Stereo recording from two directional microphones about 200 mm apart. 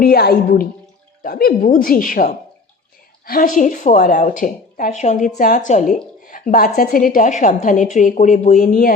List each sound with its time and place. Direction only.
0.0 s a woman's voice: 50° left (ahead or behind)